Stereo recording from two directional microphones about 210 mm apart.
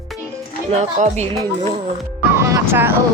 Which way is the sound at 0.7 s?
30° right (ahead or behind).